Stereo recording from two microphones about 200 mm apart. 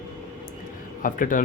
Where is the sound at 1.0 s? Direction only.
45° left (ahead or behind).